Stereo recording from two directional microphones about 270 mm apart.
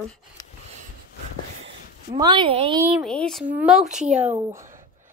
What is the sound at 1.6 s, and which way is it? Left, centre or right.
Speech, centre.